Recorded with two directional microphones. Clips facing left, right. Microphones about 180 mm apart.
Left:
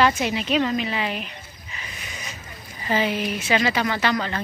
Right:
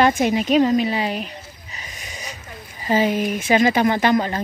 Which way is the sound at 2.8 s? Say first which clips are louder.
Right 4 dB; 40° right (ahead or behind).